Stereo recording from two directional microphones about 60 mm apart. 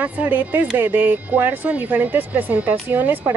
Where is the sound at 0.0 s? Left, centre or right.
Right.